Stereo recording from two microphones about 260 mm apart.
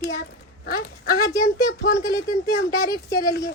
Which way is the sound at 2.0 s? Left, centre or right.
Centre.